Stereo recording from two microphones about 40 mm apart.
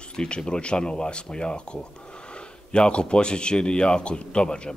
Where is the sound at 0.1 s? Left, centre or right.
Centre.